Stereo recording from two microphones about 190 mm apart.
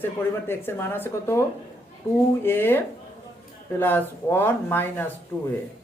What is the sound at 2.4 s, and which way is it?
Speech, 10° left (ahead or behind).